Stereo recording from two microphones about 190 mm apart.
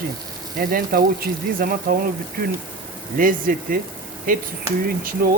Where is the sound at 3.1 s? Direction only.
45° right (ahead or behind).